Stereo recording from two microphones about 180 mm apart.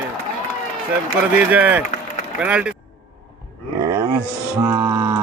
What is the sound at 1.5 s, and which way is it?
A man's voice, 10° right (ahead or behind).